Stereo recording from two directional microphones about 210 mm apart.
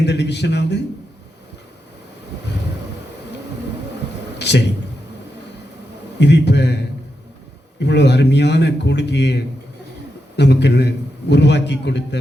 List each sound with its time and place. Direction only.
0.0 s a man's voice: 55° left (ahead or behind)
4.4 s a sound: 55° left (ahead or behind)
6.1 s a man's voice: 55° left (ahead or behind)
7.8 s a man's voice: 55° left (ahead or behind)